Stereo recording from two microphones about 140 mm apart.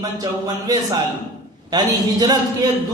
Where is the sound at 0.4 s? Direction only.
25° right (ahead or behind).